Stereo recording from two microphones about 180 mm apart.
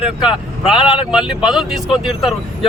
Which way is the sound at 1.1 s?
5° right (ahead or behind).